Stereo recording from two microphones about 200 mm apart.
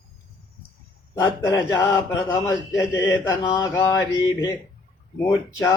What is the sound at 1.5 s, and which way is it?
A man's voice, 20° left (ahead or behind).